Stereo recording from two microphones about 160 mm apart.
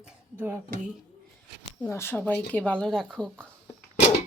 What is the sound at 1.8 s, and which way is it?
Speech, 15° left (ahead or behind).